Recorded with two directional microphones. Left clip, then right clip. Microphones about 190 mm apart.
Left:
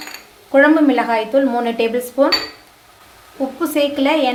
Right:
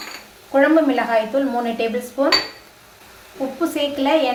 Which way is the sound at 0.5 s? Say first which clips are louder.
Left 3 dB; 40° left (ahead or behind).